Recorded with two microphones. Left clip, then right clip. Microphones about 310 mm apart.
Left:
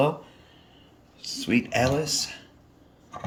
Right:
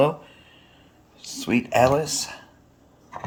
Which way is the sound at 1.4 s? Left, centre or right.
Centre.